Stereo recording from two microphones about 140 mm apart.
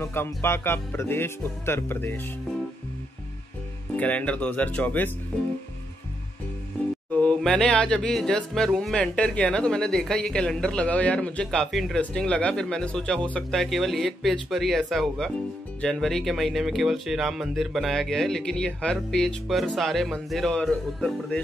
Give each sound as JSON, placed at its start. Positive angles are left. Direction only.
{"t": 0.0, "sound": "speech", "side_deg": 15}
{"t": 3.9, "sound": "speech", "side_deg": 10}
{"t": 7.1, "sound": "speech", "side_deg": 10}